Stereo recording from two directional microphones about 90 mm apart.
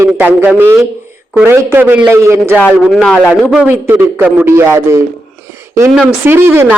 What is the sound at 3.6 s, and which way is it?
A man's voice, 20° right (ahead or behind).